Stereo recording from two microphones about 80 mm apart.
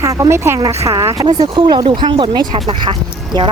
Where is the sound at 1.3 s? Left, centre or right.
Right.